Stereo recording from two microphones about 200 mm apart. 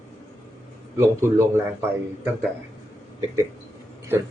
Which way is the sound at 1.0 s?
10° right (ahead or behind).